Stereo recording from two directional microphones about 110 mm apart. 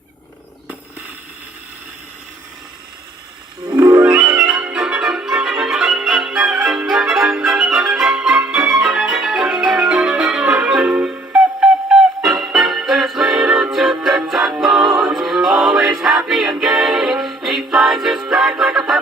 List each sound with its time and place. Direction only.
3.7 s music: 30° right (ahead or behind)
4.4 s music: 10° right (ahead or behind)